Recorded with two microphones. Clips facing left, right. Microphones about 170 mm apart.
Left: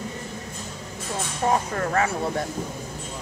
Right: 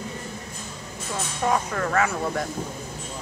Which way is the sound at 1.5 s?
30° left (ahead or behind).